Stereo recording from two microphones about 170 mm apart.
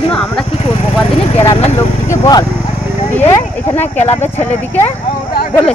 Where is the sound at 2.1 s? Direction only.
25° left (ahead or behind).